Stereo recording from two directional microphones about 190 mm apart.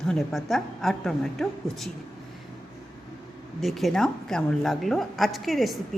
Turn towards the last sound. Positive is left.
turn(degrees=0)  # may be behind; listen again after turning